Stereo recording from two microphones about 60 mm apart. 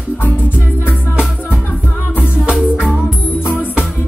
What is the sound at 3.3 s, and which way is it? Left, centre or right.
Music, left.